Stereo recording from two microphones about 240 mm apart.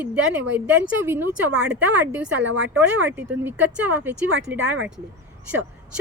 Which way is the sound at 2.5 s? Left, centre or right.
Right.